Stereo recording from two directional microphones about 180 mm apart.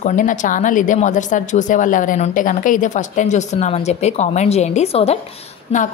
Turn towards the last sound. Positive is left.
turn(degrees=35)  # may be behind; listen again after turning